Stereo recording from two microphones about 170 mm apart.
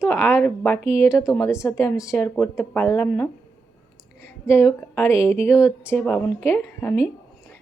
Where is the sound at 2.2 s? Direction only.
10° left (ahead or behind).